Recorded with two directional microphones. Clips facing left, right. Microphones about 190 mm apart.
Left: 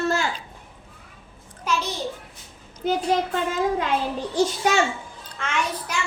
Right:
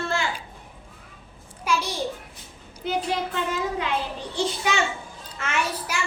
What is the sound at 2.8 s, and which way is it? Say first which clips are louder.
Speech: left 3 dB; 45° left (ahead or behind).